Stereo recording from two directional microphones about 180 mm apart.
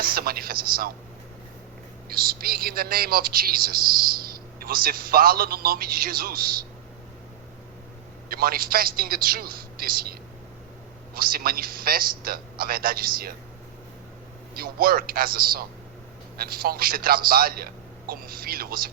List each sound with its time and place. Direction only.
0.0 s speech: 55° right (ahead or behind)
2.0 s speech: 55° right (ahead or behind)
8.3 s speech: 55° right (ahead or behind)
14.5 s speech: 55° right (ahead or behind)